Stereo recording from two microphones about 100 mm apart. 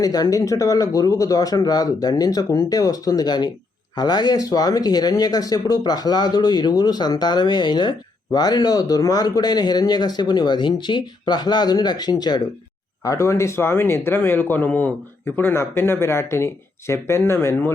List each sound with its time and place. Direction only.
0.0 s speech: 40° left (ahead or behind)
13.1 s speech: 30° left (ahead or behind)